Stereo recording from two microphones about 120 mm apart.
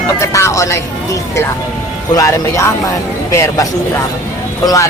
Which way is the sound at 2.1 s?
25° left (ahead or behind).